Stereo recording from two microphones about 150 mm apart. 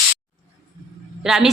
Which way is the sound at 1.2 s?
Centre (ahead or behind).